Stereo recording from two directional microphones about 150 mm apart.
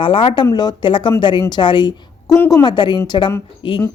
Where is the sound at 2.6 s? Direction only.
30° left (ahead or behind).